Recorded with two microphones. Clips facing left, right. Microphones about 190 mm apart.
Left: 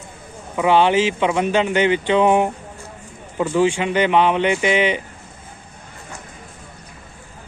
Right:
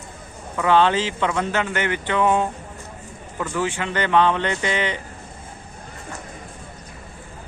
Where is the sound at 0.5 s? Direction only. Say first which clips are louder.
Left 3 dB; 15° left (ahead or behind).